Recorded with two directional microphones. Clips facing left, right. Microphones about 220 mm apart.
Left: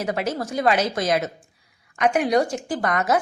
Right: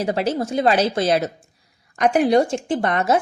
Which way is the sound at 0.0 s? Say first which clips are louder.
Right 4 dB; 30° right (ahead or behind).